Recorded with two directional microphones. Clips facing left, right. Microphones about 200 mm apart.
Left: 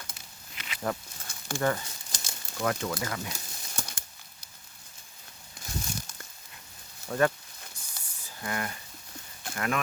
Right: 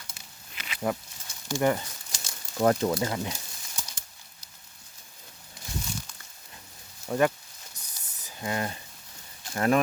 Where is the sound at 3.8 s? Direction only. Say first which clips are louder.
Left 3 dB; 55° left (ahead or behind).